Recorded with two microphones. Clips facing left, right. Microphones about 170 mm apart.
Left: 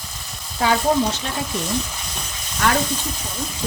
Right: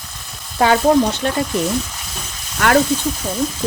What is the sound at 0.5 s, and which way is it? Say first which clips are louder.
Frying: right 5 dB; 60° right (ahead or behind).